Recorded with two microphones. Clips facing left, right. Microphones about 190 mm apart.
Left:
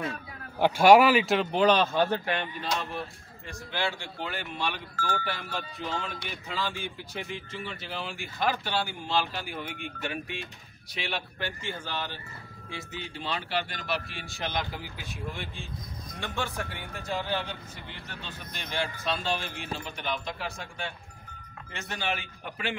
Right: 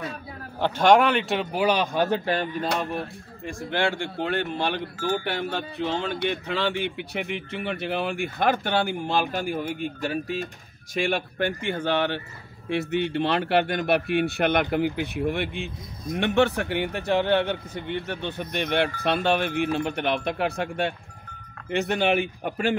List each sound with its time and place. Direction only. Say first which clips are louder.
0.6 s a man's voice: even; 10° left (ahead or behind); by 2.2 s 15° right (ahead or behind)
2.2 s speech: right 6 dB; 35° right (ahead or behind)
2.8 s a man's voice: right 6 dB; 50° right (ahead or behind)
11.0 s a man's voice: right 10 dB; 50° right (ahead or behind)
22.4 s speech: right 10 dB; 45° right (ahead or behind)